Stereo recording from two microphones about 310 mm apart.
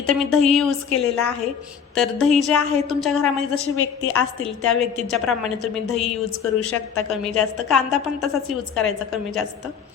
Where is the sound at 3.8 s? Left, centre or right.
Left.